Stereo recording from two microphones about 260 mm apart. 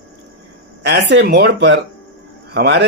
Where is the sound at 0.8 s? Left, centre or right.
Right.